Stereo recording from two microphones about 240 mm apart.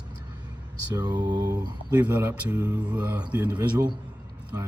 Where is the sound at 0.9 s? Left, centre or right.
Centre.